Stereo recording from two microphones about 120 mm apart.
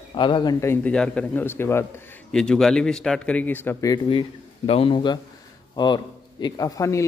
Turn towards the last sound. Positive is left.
turn(degrees=25)  # may be behind; listen again after turning